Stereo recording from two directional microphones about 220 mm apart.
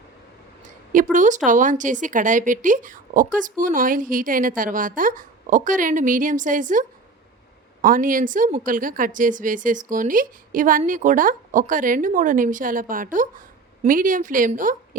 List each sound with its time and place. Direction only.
1.1 s speech: 35° right (ahead or behind)